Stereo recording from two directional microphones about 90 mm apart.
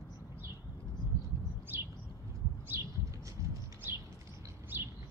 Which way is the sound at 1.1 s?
35° left (ahead or behind).